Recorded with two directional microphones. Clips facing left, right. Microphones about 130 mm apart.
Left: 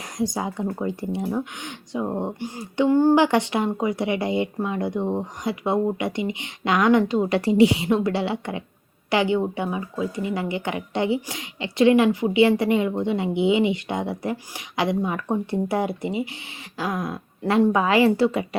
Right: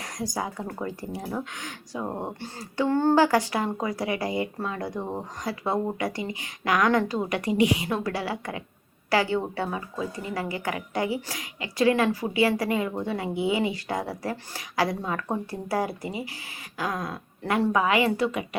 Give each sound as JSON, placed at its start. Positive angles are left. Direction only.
{"t": 0.0, "sound": "speech", "side_deg": 25}
{"t": 3.2, "sound": "speech", "side_deg": 25}